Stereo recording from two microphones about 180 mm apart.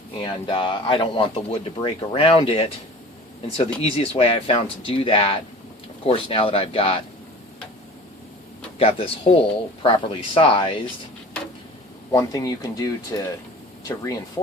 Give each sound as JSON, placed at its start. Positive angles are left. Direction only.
{"t": 0.2, "sound": "speech", "side_deg": 30}
{"t": 8.8, "sound": "speech", "side_deg": 30}
{"t": 12.1, "sound": "speech", "side_deg": 20}